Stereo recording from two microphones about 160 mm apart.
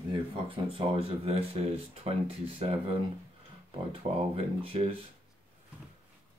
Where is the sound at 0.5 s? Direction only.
35° right (ahead or behind).